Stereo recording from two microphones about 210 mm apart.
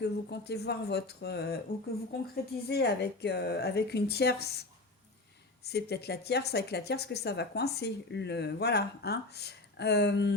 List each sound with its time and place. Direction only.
0.0 s speech: 50° left (ahead or behind)
5.6 s speech: 50° left (ahead or behind)